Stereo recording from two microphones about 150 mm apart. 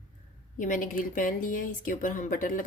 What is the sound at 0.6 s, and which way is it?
A woman's voice, 60° left (ahead or behind).